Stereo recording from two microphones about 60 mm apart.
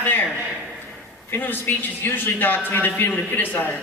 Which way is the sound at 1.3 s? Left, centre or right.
Left.